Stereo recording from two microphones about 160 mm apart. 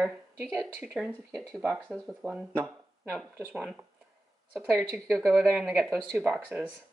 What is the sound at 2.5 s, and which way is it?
Speech, 15° right (ahead or behind).